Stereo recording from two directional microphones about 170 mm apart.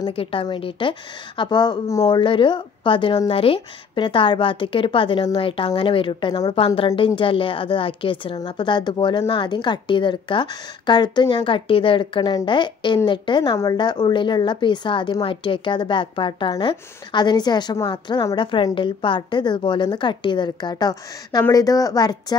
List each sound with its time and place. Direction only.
0.0 s a woman's voice: 35° left (ahead or behind)